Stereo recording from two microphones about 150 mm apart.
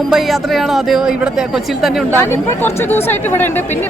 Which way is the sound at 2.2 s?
15° left (ahead or behind).